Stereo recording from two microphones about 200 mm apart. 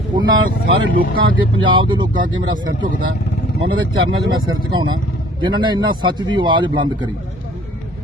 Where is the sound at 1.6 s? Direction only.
25° right (ahead or behind).